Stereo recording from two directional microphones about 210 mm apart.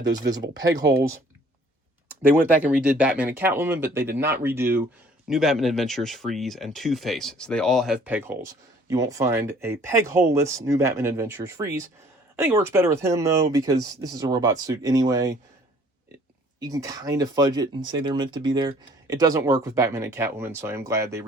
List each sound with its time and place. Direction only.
0.0 s speech: 20° right (ahead or behind)
2.0 s speech: 10° right (ahead or behind)
16.6 s speech: 15° right (ahead or behind)